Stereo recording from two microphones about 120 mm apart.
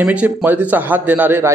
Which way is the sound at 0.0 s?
10° right (ahead or behind).